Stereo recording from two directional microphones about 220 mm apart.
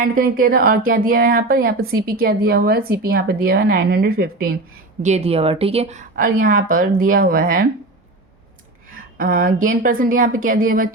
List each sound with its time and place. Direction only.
0.0 s speech: 40° right (ahead or behind)
5.0 s speech: 30° right (ahead or behind)
9.1 s speech: 40° right (ahead or behind)